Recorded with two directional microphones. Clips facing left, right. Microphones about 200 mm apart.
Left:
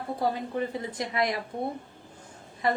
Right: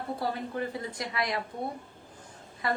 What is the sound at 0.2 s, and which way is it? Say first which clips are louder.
A woman's voice: left 6 dB; 20° left (ahead or behind).